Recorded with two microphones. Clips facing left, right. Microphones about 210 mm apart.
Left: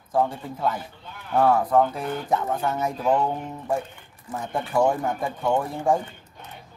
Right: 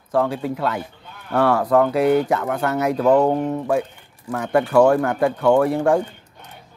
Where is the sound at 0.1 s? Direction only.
80° right.